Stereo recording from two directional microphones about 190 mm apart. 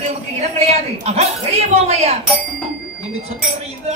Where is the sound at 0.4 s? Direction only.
35° right (ahead or behind).